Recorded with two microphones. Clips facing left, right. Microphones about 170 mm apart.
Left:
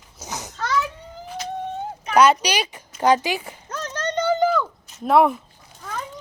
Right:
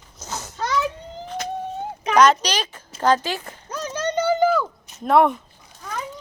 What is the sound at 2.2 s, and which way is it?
Speech, 10° left (ahead or behind).